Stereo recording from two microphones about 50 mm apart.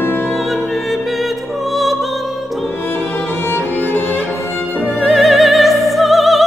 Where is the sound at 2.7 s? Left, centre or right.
Left.